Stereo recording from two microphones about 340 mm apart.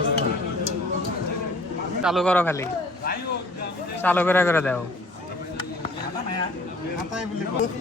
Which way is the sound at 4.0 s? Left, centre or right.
Centre.